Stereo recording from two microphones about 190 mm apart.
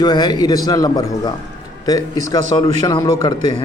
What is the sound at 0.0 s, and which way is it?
A man's voice, 20° left (ahead or behind).